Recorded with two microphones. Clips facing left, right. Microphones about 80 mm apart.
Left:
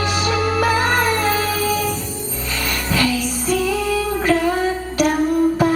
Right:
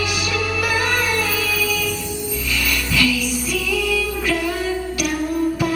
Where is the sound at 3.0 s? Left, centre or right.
Left.